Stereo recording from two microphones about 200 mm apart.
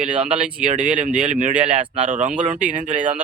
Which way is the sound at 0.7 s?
40° right (ahead or behind).